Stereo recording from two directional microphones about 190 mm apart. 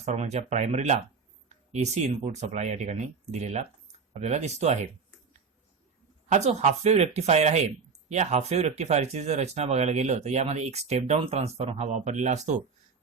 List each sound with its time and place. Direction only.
0.0 s speech: 35° right (ahead or behind)
6.2 s speech: 35° right (ahead or behind)